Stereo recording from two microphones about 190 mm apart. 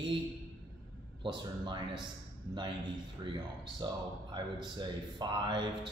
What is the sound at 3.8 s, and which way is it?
A man's voice, 25° right (ahead or behind).